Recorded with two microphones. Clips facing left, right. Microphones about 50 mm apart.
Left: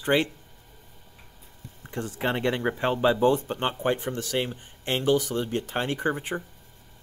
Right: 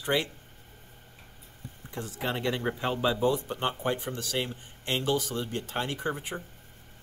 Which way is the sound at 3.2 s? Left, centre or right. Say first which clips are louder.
Left 4 dB; left.